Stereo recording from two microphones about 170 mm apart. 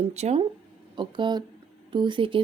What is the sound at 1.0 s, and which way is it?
Speech, 30° right (ahead or behind).